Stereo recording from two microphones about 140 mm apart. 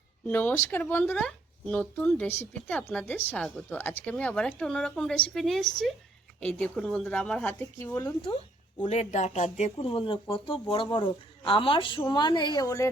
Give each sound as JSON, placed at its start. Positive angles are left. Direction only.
{"t": 0.3, "sound": "a woman's voice", "side_deg": 15}
{"t": 7.9, "sound": "speech", "side_deg": 30}
{"t": 8.9, "sound": "speech", "side_deg": 55}